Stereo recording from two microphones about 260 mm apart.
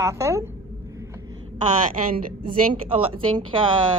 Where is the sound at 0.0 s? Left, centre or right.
Centre.